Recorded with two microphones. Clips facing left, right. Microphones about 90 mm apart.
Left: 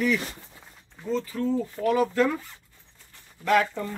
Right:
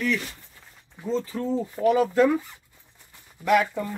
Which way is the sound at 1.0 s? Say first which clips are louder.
Even; 20° right (ahead or behind).